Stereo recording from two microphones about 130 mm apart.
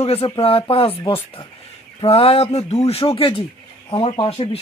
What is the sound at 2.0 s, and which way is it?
Speech, 50° left (ahead or behind).